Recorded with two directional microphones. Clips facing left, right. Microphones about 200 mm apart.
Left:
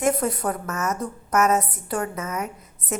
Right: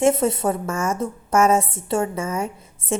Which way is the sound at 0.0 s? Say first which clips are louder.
Right 4 dB; 25° right (ahead or behind).